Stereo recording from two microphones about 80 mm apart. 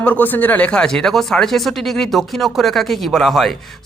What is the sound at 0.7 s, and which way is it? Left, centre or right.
Speech, centre.